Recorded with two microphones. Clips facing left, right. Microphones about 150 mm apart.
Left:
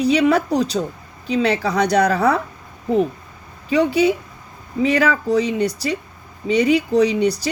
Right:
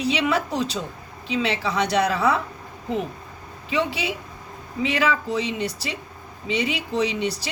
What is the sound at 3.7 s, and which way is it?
A woman's voice, 40° left (ahead or behind).